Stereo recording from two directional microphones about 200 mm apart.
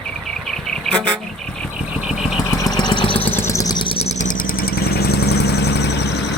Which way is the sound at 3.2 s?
10° left (ahead or behind).